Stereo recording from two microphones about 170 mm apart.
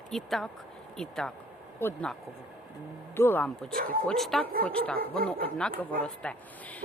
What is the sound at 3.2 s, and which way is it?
Speech, 10° left (ahead or behind).